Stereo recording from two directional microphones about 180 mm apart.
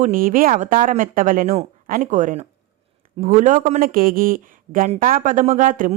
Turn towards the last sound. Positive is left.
turn(degrees=-45)  # may be behind; listen again after turning